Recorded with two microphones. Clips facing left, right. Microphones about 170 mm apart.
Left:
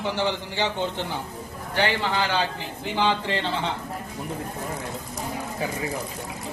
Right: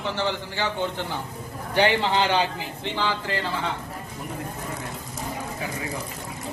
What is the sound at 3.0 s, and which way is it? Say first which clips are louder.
Speech: left 4 dB; 20° left (ahead or behind).